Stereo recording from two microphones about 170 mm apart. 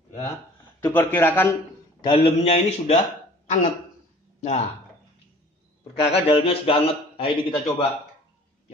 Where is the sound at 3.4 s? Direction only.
45° left (ahead or behind).